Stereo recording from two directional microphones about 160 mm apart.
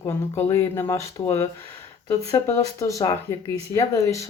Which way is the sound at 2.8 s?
20° left (ahead or behind).